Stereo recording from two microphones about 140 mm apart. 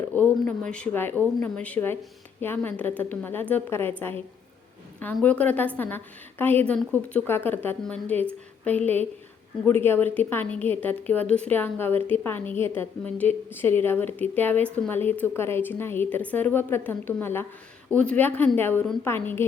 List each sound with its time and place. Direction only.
0.2 s a woman's voice: 10° left (ahead or behind)
4.9 s a woman's voice: 10° left (ahead or behind)